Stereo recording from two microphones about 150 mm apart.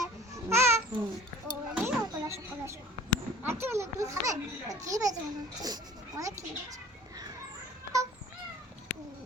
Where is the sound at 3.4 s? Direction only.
15° right (ahead or behind).